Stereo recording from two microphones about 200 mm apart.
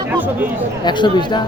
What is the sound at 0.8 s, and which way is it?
Speech, 20° left (ahead or behind).